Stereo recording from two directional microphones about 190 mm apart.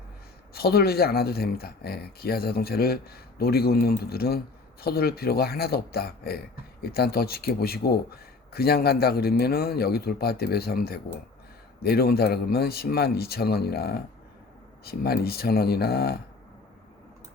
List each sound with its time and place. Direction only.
0.5 s speech: 55° left (ahead or behind)